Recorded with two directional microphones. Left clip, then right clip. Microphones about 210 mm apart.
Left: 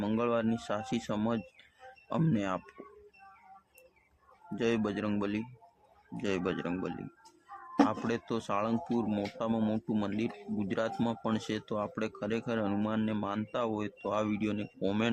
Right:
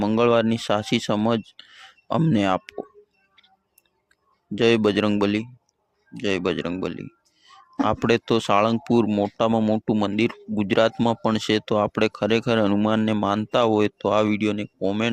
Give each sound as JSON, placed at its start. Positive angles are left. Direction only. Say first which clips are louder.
{"t": 0.0, "sound": "speech", "louder": "right 12 dB", "side_deg": -40}
{"t": 4.5, "sound": "speech", "louder": "right 13 dB", "side_deg": -45}